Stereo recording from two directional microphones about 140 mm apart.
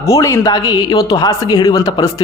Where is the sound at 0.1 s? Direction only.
20° left (ahead or behind).